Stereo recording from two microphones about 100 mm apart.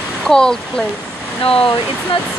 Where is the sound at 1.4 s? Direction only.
70° left (ahead or behind).